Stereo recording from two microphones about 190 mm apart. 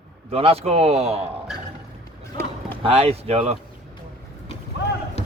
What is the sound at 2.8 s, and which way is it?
Speech, 30° right (ahead or behind).